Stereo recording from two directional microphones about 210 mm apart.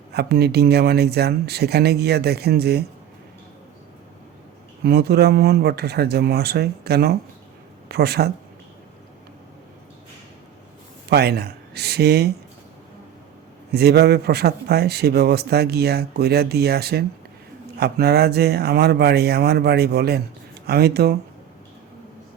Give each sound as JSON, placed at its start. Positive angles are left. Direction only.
{"t": 0.1, "sound": "speech", "side_deg": -50}
{"t": 4.8, "sound": "speech", "side_deg": -50}
{"t": 11.1, "sound": "speech", "side_deg": -50}
{"t": 13.7, "sound": "speech", "side_deg": -50}